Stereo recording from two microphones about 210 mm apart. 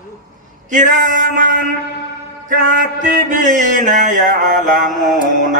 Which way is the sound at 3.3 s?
35° right (ahead or behind).